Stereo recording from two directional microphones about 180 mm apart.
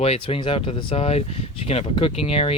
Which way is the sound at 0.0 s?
35° left (ahead or behind).